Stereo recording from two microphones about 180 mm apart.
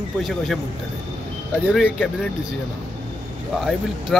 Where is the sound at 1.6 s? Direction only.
5° right (ahead or behind).